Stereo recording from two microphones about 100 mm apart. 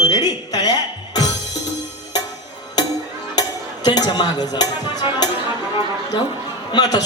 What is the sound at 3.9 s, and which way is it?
Speech, 45° left (ahead or behind).